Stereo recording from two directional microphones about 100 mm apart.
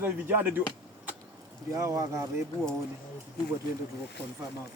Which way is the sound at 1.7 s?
30° right (ahead or behind).